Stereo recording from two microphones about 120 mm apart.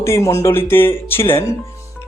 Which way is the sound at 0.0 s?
25° left (ahead or behind).